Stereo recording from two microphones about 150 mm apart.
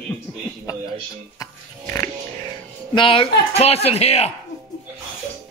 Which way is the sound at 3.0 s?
35° left (ahead or behind).